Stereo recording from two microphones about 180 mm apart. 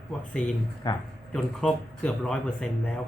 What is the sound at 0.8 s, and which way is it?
Speech, 25° left (ahead or behind).